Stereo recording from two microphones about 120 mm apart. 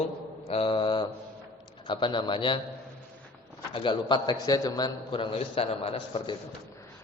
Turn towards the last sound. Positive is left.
turn(degrees=55)  # may be behind; listen again after turning